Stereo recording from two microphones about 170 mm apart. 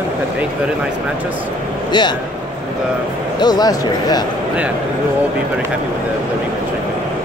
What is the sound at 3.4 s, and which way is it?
Speech, 25° left (ahead or behind).